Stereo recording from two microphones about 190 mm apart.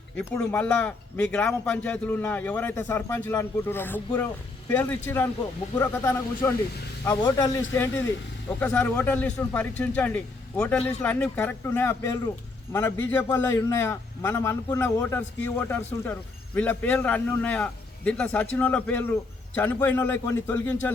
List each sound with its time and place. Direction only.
0.2 s a man's voice: 10° left (ahead or behind)